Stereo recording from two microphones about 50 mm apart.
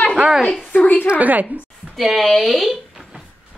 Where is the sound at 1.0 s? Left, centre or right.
Right.